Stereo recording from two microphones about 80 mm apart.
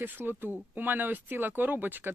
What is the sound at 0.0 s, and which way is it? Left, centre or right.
Speech, right.